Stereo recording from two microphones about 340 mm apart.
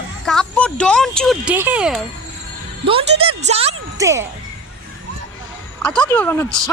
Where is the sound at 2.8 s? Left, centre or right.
Centre.